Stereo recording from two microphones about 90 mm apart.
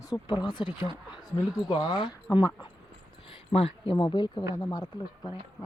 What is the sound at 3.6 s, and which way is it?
Speech, 90° left.